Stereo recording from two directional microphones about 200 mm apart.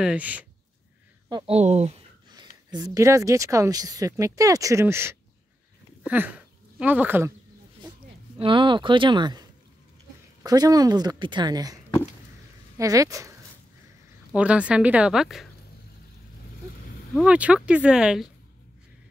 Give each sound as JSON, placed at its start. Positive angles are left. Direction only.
{"t": 0.0, "sound": "speech", "side_deg": -5}
{"t": 1.3, "sound": "speech", "side_deg": -30}
{"t": 2.3, "sound": "speech", "side_deg": -20}
{"t": 8.4, "sound": "a woman's voice", "side_deg": -25}
{"t": 10.4, "sound": "a woman's voice", "side_deg": -20}
{"t": 14.3, "sound": "speech", "side_deg": -5}
{"t": 17.1, "sound": "speech", "side_deg": -5}